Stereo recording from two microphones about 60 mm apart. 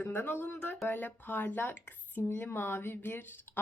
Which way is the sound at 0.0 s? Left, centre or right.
Left.